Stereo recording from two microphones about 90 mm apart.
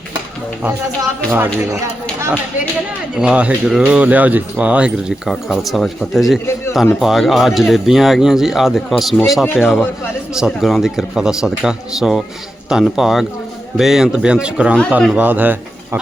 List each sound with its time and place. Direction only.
1.3 s speech: 30° right (ahead or behind)
3.2 s speech: 10° right (ahead or behind)
5.3 s speech: centre (ahead or behind); by 15.5 s 20° right (ahead or behind)